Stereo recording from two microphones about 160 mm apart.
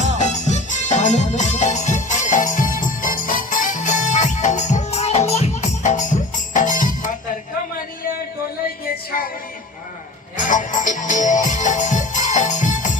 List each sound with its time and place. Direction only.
0.2 s music: 50° left (ahead or behind)
10.3 s music: 55° left (ahead or behind)